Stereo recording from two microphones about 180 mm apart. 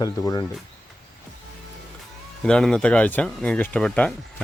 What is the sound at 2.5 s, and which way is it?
Speech, 5° left (ahead or behind).